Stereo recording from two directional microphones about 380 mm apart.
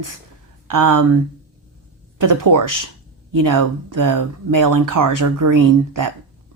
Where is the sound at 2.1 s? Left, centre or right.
Right.